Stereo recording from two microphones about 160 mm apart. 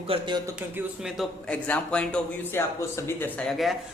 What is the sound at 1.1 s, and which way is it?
A man's voice, 10° left (ahead or behind).